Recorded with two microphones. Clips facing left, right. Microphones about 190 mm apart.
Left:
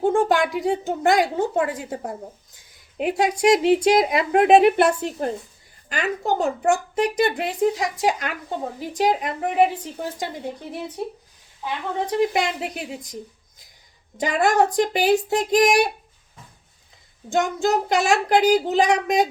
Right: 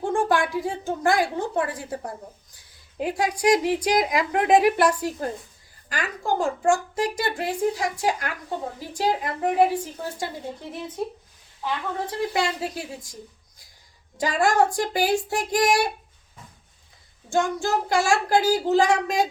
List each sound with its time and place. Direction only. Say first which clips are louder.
0.0 s a woman's voice: left 4 dB; 20° left (ahead or behind)
11.6 s speech: left 2 dB; 20° left (ahead or behind)
14.2 s speech: left 2 dB; 20° left (ahead or behind)
17.2 s speech: left 3 dB; 20° left (ahead or behind)